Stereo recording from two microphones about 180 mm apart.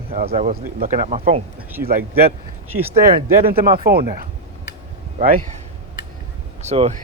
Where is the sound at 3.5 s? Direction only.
55° right (ahead or behind).